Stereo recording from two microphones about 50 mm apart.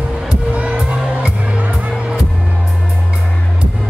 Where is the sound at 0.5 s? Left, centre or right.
Right.